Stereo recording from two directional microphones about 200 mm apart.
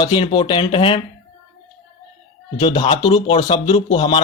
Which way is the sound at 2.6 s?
25° left (ahead or behind).